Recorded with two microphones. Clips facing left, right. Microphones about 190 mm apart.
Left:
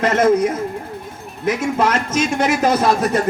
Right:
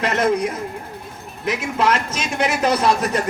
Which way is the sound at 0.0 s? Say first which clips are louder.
Left 5 dB; 45° left (ahead or behind).